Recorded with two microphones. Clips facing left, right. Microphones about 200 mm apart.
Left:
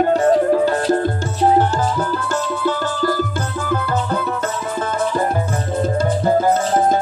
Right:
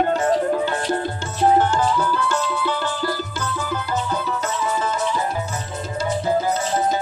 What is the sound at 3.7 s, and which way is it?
Music, 55° left (ahead or behind).